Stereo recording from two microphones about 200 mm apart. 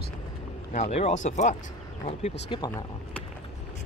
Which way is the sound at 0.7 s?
35° left (ahead or behind).